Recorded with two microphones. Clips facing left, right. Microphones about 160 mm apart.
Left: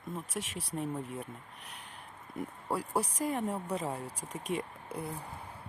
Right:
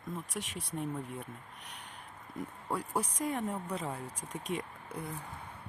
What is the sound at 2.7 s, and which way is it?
Speech, 30° left (ahead or behind).